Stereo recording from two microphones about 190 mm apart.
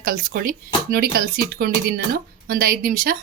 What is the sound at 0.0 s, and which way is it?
A woman's voice, 50° right (ahead or behind).